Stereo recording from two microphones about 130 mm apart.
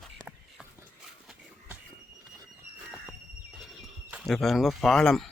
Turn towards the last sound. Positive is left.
turn(degrees=5)  # may be behind; listen again after turning